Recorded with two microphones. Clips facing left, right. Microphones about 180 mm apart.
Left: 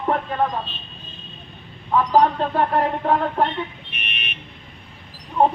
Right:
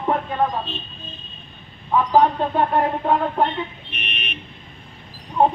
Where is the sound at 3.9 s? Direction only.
85° left.